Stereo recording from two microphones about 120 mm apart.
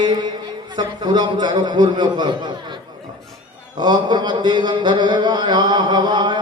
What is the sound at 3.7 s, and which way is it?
Mantra, 35° right (ahead or behind).